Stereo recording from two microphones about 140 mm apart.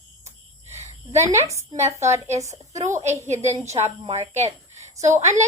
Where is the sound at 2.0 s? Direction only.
20° right (ahead or behind).